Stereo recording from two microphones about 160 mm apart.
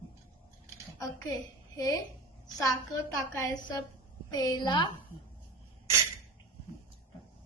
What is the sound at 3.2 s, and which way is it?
A woman's voice, 20° left (ahead or behind).